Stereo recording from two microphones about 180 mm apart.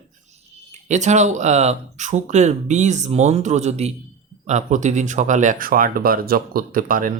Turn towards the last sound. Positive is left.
turn(degrees=-50)  # may be behind; listen again after turning